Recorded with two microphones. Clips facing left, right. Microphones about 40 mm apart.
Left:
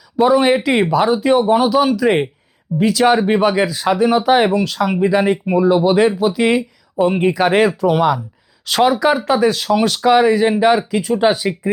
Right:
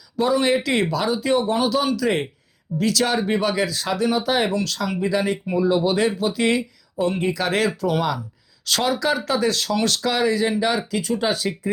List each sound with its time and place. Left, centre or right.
0.2 s speech: left